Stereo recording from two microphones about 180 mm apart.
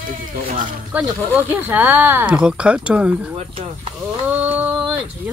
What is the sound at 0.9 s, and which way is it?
Speech, 10° right (ahead or behind).